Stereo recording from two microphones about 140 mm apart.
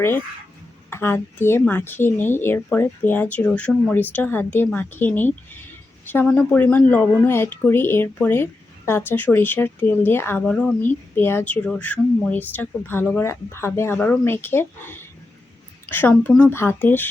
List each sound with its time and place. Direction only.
0.9 s speech: 15° left (ahead or behind)